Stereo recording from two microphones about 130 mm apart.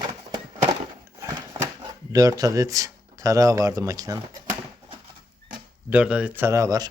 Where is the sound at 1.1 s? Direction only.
20° right (ahead or behind).